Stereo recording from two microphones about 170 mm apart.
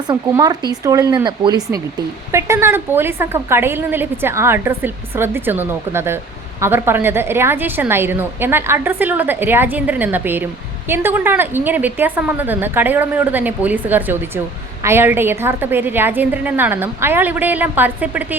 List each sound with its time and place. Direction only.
0.1 s a woman's voice: 20° right (ahead or behind)